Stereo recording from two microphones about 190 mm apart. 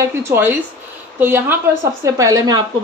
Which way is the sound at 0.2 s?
10° right (ahead or behind).